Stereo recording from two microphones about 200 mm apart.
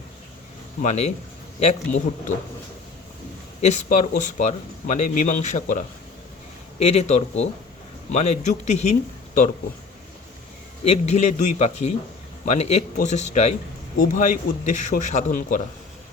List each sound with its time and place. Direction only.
0.8 s a man's voice: 35° left (ahead or behind)
3.6 s a man's voice: 35° left (ahead or behind)
6.8 s a man's voice: 30° left (ahead or behind)
10.8 s a man's voice: 30° left (ahead or behind)